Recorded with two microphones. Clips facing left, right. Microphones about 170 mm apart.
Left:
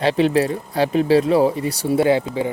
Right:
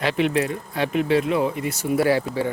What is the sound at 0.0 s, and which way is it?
Speech, 30° left (ahead or behind).